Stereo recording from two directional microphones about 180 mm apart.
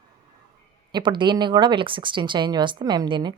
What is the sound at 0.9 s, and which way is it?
Speech, 25° right (ahead or behind).